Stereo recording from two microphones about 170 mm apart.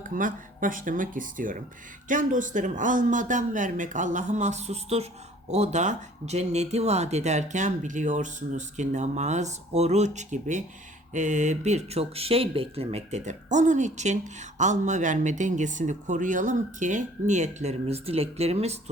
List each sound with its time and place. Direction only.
0.0 s speech: 50° right (ahead or behind)